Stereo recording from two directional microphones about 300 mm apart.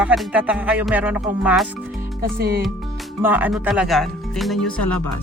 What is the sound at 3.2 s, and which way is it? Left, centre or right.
Speech, centre.